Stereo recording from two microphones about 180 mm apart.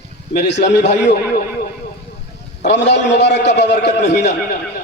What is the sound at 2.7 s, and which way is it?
A man's voice, 75° left (ahead or behind).